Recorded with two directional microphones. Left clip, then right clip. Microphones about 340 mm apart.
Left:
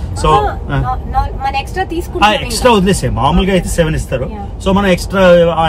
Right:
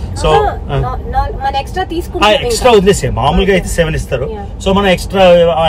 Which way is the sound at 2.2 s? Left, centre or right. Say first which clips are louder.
Right 1 dB; centre.